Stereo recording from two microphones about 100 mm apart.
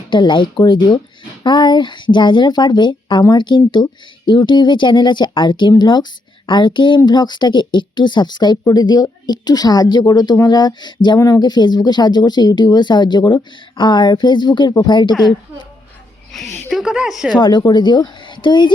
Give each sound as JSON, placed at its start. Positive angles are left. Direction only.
{"t": 0.1, "sound": "a woman's voice", "side_deg": 55}
{"t": 14.7, "sound": "speech", "side_deg": 40}
{"t": 16.3, "sound": "a woman's voice", "side_deg": 0}
{"t": 17.3, "sound": "a woman's voice", "side_deg": 50}